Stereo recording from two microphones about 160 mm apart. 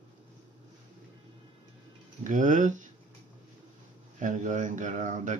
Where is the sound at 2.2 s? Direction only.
50° right (ahead or behind).